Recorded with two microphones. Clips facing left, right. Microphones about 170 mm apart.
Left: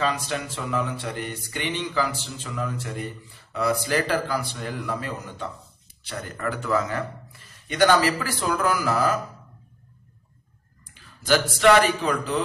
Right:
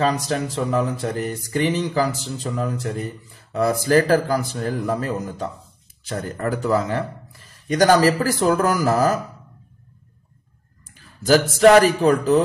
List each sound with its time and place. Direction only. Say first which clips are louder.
0.0 s a man's voice: right 5 dB; 40° right (ahead or behind)
11.2 s a man's voice: right 5 dB; 40° right (ahead or behind)